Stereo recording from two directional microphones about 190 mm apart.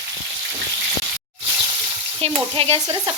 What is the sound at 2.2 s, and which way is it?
Stir, 30° right (ahead or behind).